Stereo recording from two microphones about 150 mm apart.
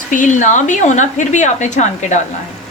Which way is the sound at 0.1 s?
55° left (ahead or behind).